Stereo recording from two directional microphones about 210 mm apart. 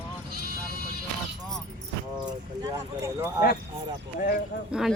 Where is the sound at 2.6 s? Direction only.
15° right (ahead or behind).